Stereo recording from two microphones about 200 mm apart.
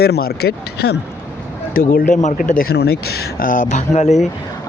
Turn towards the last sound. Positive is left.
turn(degrees=35)  # may be behind; listen again after turning